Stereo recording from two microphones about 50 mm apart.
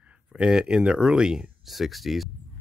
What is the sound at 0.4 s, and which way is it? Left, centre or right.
Speech, centre.